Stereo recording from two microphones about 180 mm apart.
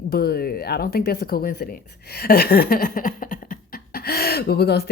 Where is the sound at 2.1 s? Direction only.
60° left (ahead or behind).